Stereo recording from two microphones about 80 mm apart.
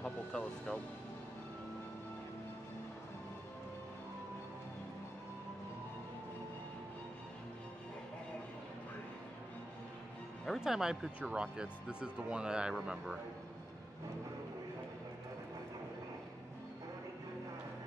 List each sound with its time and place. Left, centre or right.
0.0 s music: centre
10.4 s speech: centre